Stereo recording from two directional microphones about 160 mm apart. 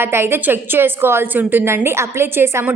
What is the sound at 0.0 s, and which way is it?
A woman's voice, 15° right (ahead or behind).